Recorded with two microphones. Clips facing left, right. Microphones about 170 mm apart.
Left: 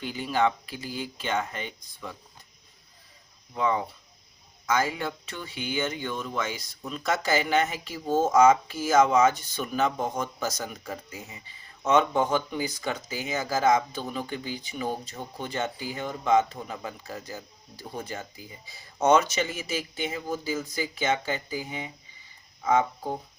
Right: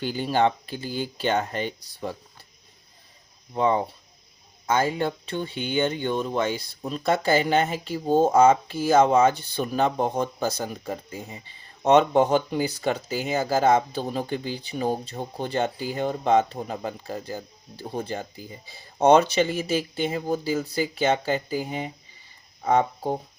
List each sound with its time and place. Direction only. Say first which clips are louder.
0.0 s speech: right 3 dB; 35° right (ahead or behind)
3.5 s speech: right 4 dB; 30° right (ahead or behind)